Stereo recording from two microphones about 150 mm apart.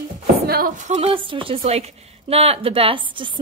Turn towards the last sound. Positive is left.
turn(degrees=-35)  # may be behind; listen again after turning